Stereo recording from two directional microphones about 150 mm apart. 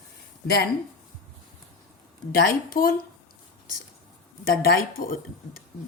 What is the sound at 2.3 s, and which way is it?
Speech, 80° left.